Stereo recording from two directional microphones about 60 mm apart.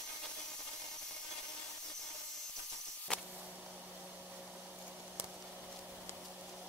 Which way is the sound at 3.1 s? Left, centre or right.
Centre.